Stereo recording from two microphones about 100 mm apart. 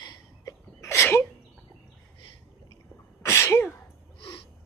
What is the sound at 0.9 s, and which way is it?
Sneeze, 20° left (ahead or behind).